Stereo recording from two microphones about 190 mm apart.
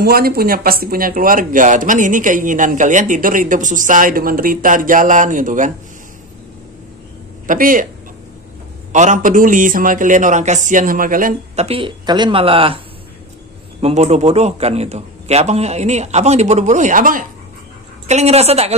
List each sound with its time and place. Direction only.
0.0 s speech: 50° right (ahead or behind)
7.4 s speech: 45° right (ahead or behind)
8.9 s speech: 40° right (ahead or behind)
11.6 s a man's voice: 30° right (ahead or behind); by 17.2 s 45° right (ahead or behind)
18.0 s a man's voice: 35° right (ahead or behind)